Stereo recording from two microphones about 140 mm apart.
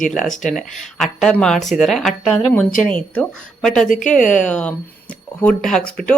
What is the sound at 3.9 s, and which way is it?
Speech, 65° left (ahead or behind).